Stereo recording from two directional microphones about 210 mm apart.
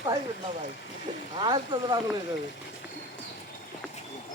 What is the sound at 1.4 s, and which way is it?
Speech, 20° right (ahead or behind).